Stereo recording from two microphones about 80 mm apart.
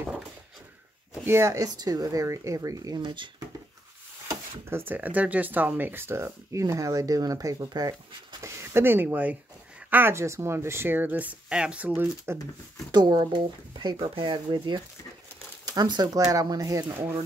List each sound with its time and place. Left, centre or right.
1.2 s speech: right
1.8 s speech: right
3.0 s speech: right
4.6 s speech: right
8.4 s speech: right
10.1 s speech: right
12.9 s speech: right
15.6 s speech: right
16.9 s speech: right